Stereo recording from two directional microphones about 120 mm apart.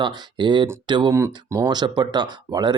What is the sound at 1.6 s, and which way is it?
Speech, 35° right (ahead or behind).